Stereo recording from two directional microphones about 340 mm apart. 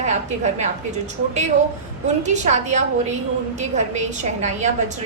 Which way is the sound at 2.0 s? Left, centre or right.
Centre.